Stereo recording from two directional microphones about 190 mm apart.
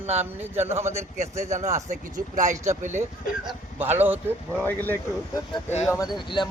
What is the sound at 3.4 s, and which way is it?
Speech, 10° right (ahead or behind).